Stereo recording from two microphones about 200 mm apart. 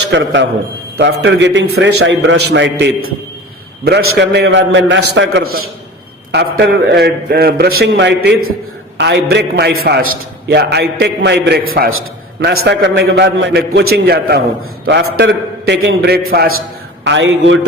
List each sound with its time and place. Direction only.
0.1 s a man's voice: 65° right (ahead or behind)
16.6 s a man's voice: 60° right (ahead or behind)